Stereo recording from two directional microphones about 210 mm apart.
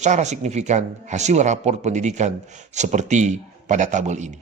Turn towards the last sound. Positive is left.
turn(degrees=-35)  # may be behind; listen again after turning